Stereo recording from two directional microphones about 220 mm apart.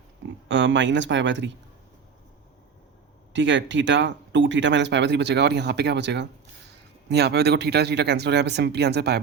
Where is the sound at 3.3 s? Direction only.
55° right (ahead or behind).